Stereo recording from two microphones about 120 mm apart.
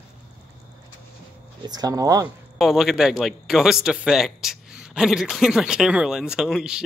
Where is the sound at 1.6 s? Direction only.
35° right (ahead or behind).